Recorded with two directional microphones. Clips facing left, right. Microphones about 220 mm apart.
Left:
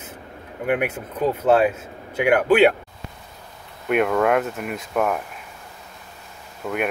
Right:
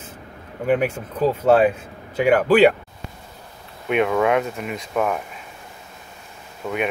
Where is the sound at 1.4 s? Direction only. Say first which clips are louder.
Right 2 dB; 5° left (ahead or behind).